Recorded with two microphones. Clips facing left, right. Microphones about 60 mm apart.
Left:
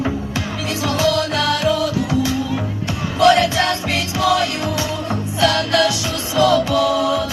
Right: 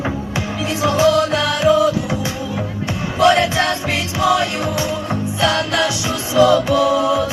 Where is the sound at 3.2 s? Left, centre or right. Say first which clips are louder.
Even; right.